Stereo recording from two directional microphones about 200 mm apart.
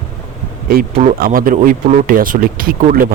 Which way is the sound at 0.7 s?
40° right (ahead or behind).